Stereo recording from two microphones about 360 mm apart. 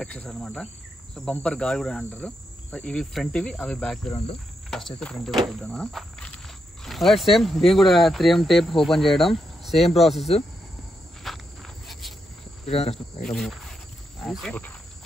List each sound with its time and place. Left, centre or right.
0.0 s cricket: centre
4.6 s speech: centre
11.2 s cricket: centre
12.6 s speech: centre
13.3 s speech: centre
14.2 s cricket: centre